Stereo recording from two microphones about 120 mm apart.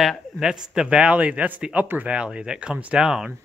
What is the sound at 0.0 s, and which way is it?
Speech, centre (ahead or behind).